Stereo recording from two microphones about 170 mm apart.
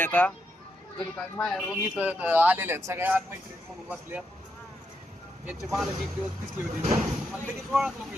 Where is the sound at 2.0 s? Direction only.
10° right (ahead or behind).